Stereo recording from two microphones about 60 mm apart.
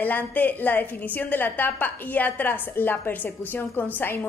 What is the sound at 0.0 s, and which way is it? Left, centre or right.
A woman's voice, left.